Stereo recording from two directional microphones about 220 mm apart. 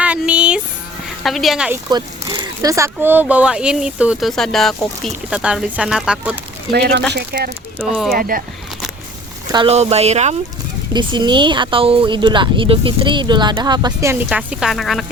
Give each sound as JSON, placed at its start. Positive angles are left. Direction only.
{"t": 0.0, "sound": "a sound", "side_deg": -5}
{"t": 1.2, "sound": "speech", "side_deg": 0}
{"t": 1.9, "sound": "speech", "side_deg": -20}
{"t": 6.7, "sound": "speech", "side_deg": -45}
{"t": 9.5, "sound": "speech", "side_deg": -25}
{"t": 10.9, "sound": "speech", "side_deg": -20}